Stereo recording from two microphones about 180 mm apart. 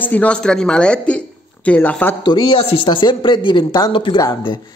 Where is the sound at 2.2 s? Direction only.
25° left (ahead or behind).